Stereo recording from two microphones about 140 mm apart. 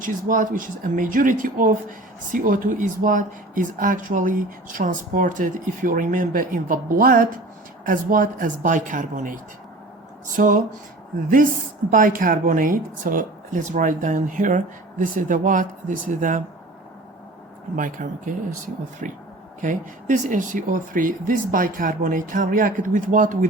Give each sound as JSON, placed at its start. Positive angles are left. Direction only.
{"t": 0.0, "sound": "speech", "side_deg": -70}
{"t": 7.9, "sound": "speech", "side_deg": -75}
{"t": 11.9, "sound": "speech", "side_deg": -75}
{"t": 17.7, "sound": "speech", "side_deg": -75}